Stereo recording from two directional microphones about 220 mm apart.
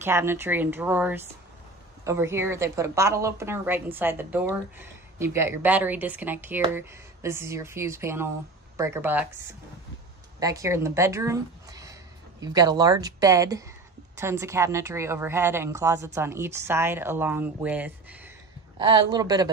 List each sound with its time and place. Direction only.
0.0 s speech: 10° right (ahead or behind)
18.8 s speech: 20° right (ahead or behind)